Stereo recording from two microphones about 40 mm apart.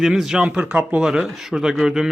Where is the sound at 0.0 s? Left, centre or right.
Centre.